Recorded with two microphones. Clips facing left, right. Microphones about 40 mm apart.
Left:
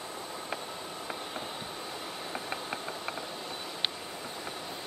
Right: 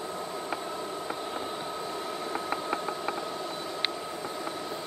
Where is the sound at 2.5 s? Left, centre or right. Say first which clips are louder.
Right 6 dB; centre.